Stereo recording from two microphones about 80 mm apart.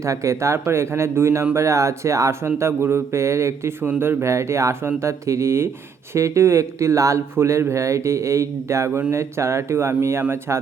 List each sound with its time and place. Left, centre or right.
0.0 s speech: right
3.8 s speech: right